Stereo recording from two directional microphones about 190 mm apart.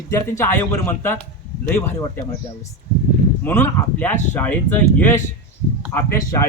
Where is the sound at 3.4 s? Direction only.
10° left (ahead or behind).